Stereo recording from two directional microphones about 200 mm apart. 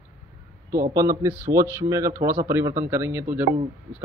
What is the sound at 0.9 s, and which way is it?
A man's voice, 15° right (ahead or behind).